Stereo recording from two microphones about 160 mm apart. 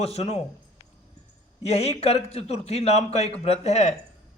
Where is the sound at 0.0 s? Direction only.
40° left (ahead or behind).